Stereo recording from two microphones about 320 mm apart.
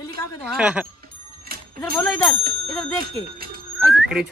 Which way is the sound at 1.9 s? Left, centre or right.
Centre.